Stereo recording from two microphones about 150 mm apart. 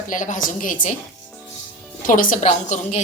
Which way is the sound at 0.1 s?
60° left (ahead or behind).